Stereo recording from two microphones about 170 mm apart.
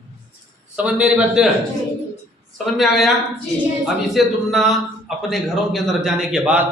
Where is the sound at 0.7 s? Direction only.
5° right (ahead or behind).